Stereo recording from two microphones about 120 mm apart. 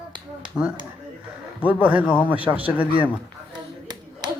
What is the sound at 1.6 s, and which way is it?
Speech, 10° right (ahead or behind).